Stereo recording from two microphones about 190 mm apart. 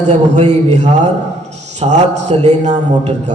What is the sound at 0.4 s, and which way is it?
A man's voice, 40° right (ahead or behind).